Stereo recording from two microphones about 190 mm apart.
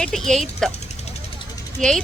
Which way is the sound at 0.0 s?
Centre (ahead or behind).